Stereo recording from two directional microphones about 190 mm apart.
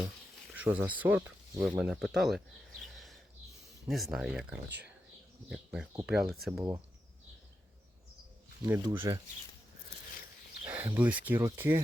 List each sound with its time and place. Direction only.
0.5 s speech: 10° right (ahead or behind)
2.8 s a sound: centre (ahead or behind)
3.8 s speech: centre (ahead or behind)
8.6 s speech: 10° right (ahead or behind)
10.7 s speech: 10° right (ahead or behind)